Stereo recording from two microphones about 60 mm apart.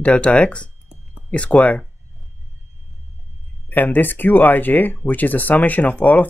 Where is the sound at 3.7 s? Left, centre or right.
Left.